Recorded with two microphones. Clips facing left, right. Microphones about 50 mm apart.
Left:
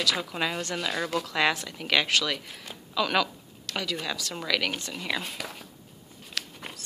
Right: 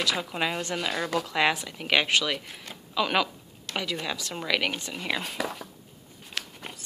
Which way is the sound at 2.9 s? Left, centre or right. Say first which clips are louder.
Even; centre.